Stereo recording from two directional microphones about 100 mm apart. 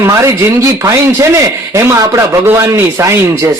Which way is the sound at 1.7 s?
35° right (ahead or behind).